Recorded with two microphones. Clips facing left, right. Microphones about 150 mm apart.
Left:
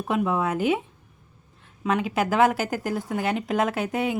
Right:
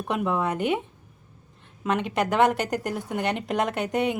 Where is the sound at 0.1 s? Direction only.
Centre (ahead or behind).